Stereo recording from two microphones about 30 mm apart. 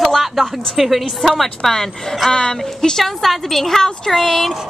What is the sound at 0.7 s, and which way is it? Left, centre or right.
Speech, centre.